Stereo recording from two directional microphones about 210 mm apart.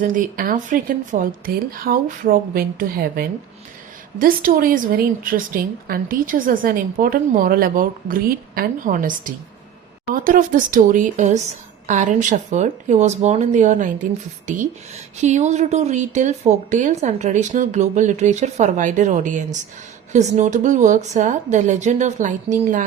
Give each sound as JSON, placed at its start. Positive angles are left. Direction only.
{"t": 0.0, "sound": "a woman's voice", "side_deg": -40}